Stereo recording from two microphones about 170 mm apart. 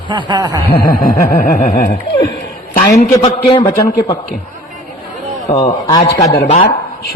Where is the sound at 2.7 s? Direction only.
45° left (ahead or behind).